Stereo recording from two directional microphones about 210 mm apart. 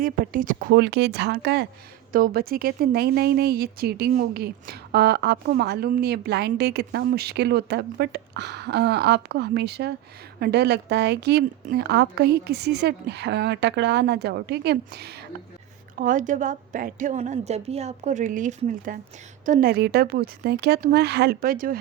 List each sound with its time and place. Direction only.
0.0 s a woman's voice: 40° right (ahead or behind)
16.0 s a woman's voice: 40° right (ahead or behind)